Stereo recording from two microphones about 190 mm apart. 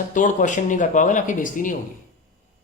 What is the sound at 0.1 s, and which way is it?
A man's voice, 45° left (ahead or behind).